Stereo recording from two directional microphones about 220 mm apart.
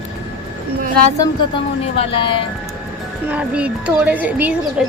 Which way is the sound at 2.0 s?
25° left (ahead or behind).